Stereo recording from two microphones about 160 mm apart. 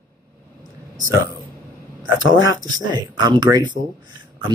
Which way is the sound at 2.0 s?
20° right (ahead or behind).